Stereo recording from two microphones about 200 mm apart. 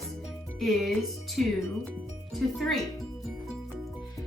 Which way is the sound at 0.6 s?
Centre (ahead or behind).